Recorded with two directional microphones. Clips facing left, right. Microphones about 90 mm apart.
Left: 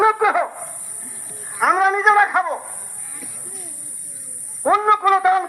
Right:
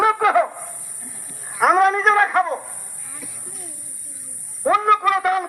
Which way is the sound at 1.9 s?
15° left (ahead or behind).